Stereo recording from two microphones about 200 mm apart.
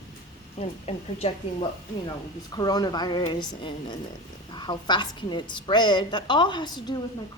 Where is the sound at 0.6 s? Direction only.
30° left (ahead or behind).